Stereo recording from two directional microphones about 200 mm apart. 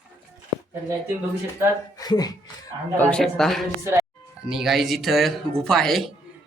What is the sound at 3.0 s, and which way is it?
Speech, 5° left (ahead or behind).